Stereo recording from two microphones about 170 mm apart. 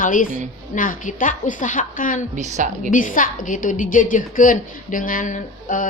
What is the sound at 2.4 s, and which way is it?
Speech, 45° right (ahead or behind).